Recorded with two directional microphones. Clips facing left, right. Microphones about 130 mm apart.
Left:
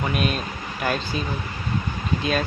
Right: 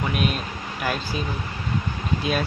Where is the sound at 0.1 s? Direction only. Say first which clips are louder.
Left 1 dB; 5° right (ahead or behind).